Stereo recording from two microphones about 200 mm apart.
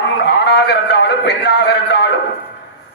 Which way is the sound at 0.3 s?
60° left (ahead or behind).